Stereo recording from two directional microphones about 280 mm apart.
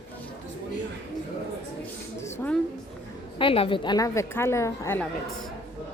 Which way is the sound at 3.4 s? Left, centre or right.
Centre.